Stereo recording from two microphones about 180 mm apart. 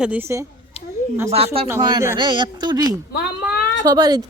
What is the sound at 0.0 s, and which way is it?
Speech, 10° right (ahead or behind).